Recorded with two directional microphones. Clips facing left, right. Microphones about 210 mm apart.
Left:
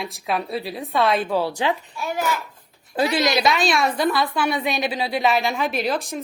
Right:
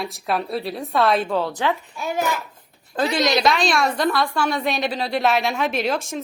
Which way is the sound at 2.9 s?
10° left (ahead or behind).